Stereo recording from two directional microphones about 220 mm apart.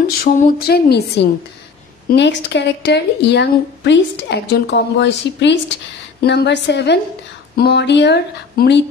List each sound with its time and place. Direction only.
0.2 s a woman's voice: 40° left (ahead or behind)